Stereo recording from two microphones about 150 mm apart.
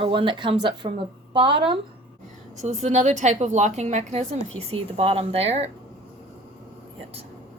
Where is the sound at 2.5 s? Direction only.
50° right (ahead or behind).